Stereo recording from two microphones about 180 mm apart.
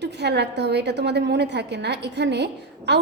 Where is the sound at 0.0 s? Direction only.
70° right (ahead or behind).